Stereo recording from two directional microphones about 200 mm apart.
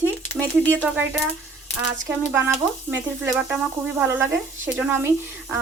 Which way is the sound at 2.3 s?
10° right (ahead or behind).